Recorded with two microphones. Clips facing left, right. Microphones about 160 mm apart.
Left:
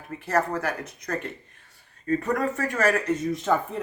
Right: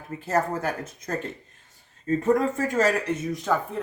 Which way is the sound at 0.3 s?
25° right (ahead or behind).